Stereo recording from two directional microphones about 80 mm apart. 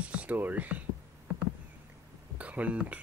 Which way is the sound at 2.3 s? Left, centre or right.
Centre.